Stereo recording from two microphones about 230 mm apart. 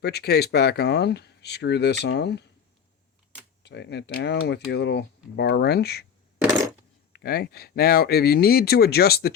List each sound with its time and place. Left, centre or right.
0.0 s speech: left
3.6 s speech: left
7.1 s speech: left